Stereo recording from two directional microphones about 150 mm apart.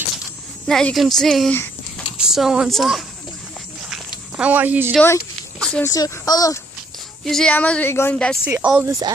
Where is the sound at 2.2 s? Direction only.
5° right (ahead or behind).